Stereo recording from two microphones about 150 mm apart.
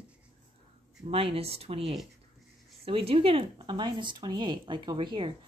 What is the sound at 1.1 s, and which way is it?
Speech, 40° right (ahead or behind).